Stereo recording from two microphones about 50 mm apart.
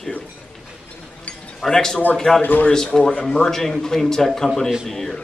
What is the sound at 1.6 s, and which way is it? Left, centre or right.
Speech, centre.